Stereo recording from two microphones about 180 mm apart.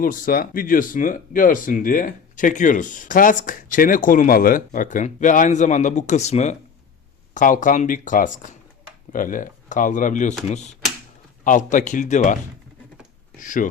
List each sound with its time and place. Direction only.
0.0 s speech: 50° left (ahead or behind)
13.4 s speech: 45° left (ahead or behind)